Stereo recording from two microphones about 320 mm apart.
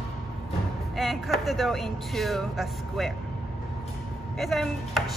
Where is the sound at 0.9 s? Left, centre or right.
Centre.